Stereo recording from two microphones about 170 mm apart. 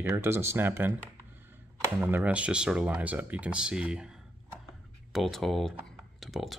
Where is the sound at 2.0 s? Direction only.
10° right (ahead or behind).